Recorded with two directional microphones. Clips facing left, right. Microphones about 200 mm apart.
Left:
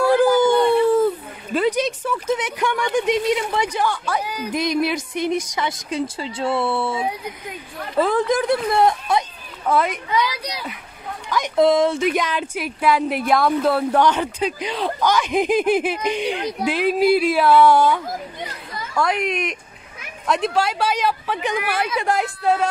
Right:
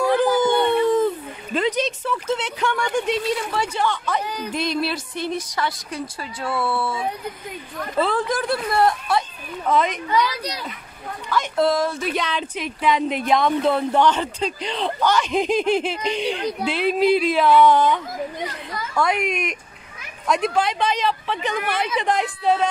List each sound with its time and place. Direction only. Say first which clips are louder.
0.0 s howl: left 3 dB; 10° left (ahead or behind)
0.4 s a sound: left 3 dB; 5° left (ahead or behind)
3.0 s speech: left 6 dB; 15° left (ahead or behind)
9.7 s speech: even; 10° left (ahead or behind)
12.1 s speech: left 3 dB; 10° left (ahead or behind)
18.9 s a woman's voice: left 1 dB; centre (ahead or behind)